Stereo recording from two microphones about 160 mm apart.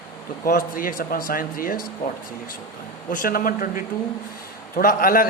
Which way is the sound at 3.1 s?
60° left (ahead or behind).